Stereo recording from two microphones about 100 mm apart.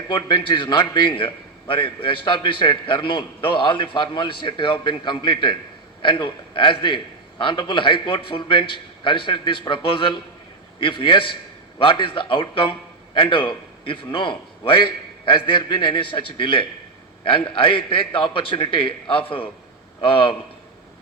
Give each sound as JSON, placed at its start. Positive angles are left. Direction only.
{"t": 0.1, "sound": "a man's voice", "side_deg": 50}